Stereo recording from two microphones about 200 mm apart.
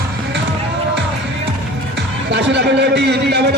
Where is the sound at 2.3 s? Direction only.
60° right (ahead or behind).